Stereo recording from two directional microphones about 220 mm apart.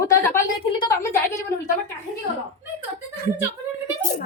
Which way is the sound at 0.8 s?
15° left (ahead or behind).